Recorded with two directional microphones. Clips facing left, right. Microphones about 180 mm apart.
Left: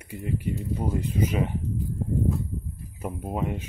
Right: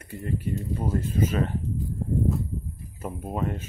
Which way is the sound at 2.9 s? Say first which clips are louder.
Left 1 dB; 15° left (ahead or behind).